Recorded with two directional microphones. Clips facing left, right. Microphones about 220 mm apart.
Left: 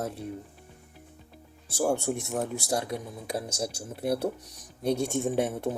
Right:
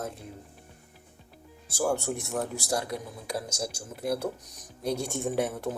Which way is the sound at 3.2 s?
30° left (ahead or behind).